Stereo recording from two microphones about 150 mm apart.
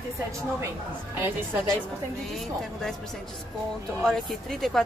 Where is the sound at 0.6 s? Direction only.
15° right (ahead or behind).